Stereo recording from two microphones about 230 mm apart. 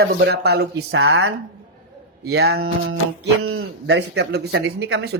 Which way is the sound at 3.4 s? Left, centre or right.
Right.